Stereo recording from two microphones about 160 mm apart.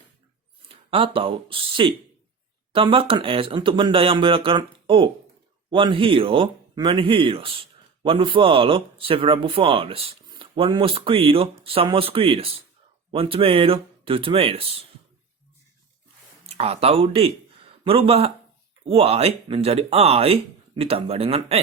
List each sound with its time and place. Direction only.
0.7 s speech: 35° right (ahead or behind)
16.5 s a man's voice: 40° right (ahead or behind)